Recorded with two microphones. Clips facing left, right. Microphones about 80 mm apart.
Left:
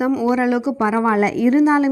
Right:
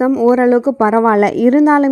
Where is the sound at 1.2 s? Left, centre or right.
Right.